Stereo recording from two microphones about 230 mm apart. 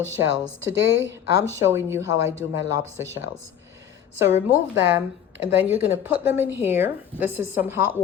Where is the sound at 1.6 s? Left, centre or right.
Centre.